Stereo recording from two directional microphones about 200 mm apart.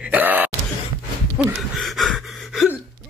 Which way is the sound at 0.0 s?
10° right (ahead or behind).